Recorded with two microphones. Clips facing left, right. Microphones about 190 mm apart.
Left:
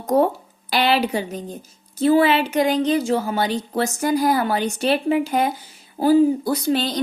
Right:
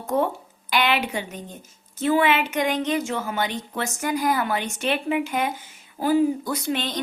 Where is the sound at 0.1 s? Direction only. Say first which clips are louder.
Left 6 dB; 35° left (ahead or behind).